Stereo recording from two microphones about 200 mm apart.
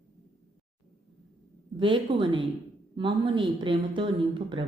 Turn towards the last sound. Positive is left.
turn(degrees=-25)  # may be behind; listen again after turning